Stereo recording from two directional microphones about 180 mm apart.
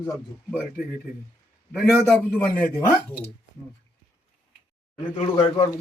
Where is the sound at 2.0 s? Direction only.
10° left (ahead or behind).